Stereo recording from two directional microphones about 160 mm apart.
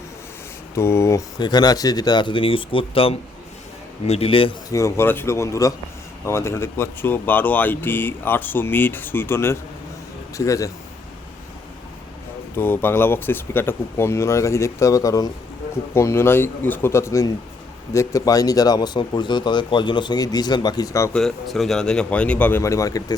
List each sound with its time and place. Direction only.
0.8 s speech: 15° left (ahead or behind); by 4.5 s 35° left (ahead or behind)
4.7 s speech: 20° left (ahead or behind)
12.5 s speech: 15° left (ahead or behind)
21.1 s speech: 5° left (ahead or behind); by 23.1 s 20° left (ahead or behind)